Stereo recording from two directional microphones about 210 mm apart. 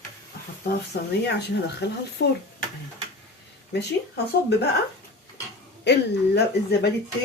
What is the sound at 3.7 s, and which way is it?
Speech, 50° left (ahead or behind).